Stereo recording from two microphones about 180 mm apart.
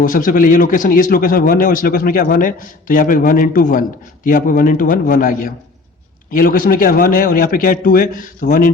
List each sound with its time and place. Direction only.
0.0 s a man's voice: 50° left (ahead or behind)